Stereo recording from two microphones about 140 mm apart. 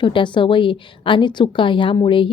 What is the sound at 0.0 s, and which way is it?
A woman's voice, 35° left (ahead or behind).